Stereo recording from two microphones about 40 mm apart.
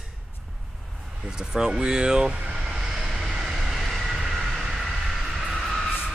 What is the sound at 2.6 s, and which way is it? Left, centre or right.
Vehicle, centre.